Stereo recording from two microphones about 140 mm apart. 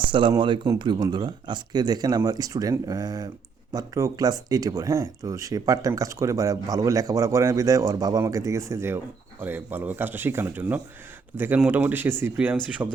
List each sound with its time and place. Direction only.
0.1 s speech: 35° right (ahead or behind); by 13.0 s 15° right (ahead or behind)